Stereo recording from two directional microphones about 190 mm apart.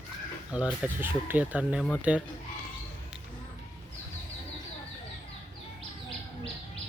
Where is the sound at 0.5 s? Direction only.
5° right (ahead or behind).